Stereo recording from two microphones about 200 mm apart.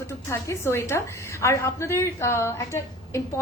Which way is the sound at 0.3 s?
15° left (ahead or behind).